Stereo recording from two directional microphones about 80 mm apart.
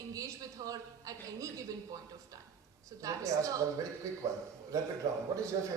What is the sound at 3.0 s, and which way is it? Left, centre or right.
Speech, right.